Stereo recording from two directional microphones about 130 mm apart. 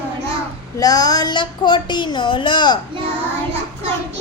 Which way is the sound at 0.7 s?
30° left (ahead or behind).